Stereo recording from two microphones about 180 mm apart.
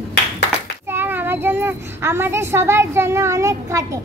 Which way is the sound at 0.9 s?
10° right (ahead or behind).